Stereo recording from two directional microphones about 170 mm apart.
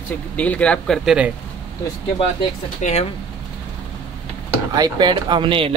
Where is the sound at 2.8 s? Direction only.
45° left (ahead or behind).